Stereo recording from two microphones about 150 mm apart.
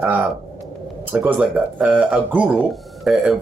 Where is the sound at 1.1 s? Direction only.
10° right (ahead or behind).